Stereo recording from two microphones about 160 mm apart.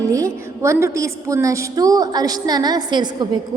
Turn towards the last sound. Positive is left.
turn(degrees=-25)  # may be behind; listen again after turning